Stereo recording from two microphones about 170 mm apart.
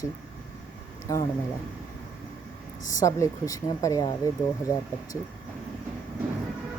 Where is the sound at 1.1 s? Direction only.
20° left (ahead or behind).